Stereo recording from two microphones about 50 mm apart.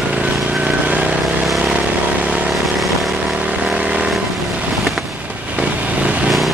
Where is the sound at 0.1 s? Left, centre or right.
Right.